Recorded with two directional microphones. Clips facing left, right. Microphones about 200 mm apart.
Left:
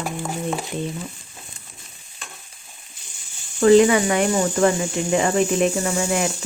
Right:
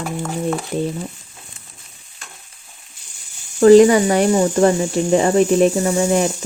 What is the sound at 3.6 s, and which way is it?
Speech, 40° right (ahead or behind).